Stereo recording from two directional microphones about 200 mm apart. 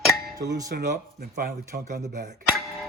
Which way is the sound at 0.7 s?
50° right (ahead or behind).